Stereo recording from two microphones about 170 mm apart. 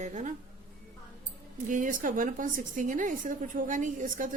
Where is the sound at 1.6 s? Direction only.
50° right (ahead or behind).